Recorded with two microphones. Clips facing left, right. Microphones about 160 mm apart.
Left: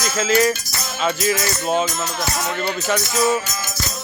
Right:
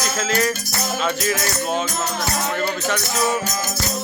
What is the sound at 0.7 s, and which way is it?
Music, 60° right (ahead or behind).